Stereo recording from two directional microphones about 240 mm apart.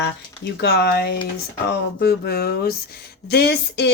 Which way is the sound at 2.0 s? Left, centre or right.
Left.